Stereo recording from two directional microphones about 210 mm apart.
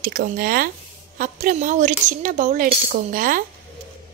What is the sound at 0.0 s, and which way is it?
A woman's voice, 45° right (ahead or behind).